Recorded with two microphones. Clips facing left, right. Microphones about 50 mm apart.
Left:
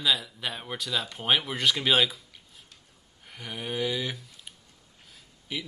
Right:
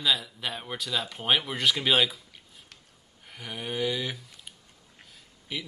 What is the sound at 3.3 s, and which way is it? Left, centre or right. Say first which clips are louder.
Speech: even; centre.